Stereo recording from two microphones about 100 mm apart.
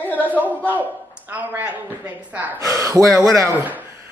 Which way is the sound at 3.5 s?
20° right (ahead or behind).